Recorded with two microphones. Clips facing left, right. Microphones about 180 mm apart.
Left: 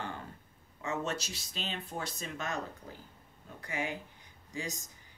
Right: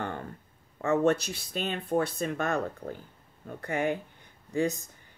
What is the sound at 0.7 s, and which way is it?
Speech, 55° right (ahead or behind).